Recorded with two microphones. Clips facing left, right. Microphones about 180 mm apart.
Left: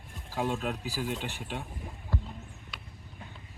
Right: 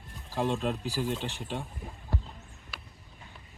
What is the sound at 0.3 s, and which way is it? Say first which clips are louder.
Speech: right 2 dB; 5° left (ahead or behind).